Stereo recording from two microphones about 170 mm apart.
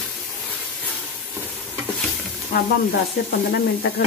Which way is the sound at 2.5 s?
65° left (ahead or behind).